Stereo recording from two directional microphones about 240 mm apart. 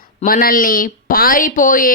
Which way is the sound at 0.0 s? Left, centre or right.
Left.